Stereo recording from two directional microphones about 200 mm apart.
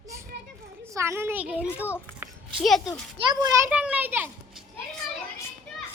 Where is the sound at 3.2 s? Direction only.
20° right (ahead or behind).